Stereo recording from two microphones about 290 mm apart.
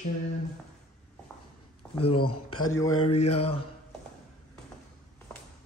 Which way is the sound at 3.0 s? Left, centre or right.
Left.